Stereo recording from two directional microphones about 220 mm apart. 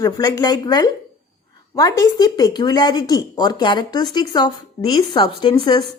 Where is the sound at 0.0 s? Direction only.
15° left (ahead or behind).